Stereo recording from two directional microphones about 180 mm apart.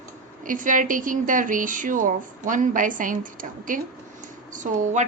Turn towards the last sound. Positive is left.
turn(degrees=-45)  # may be behind; listen again after turning